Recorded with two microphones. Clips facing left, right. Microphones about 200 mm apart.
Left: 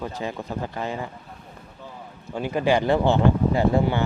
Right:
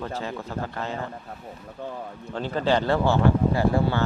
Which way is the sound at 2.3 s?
15° left (ahead or behind).